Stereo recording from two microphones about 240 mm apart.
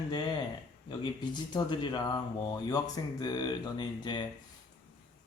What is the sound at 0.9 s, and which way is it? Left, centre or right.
Speech, centre.